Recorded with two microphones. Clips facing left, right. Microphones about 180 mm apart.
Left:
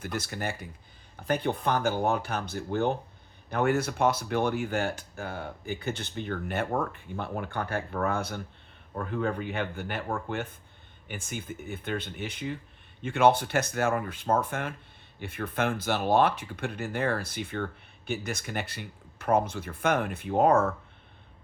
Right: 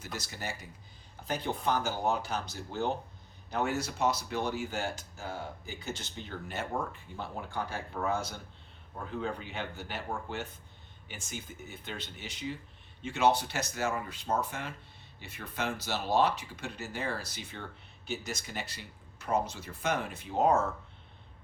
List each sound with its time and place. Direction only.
0.0 s speech: 55° left (ahead or behind)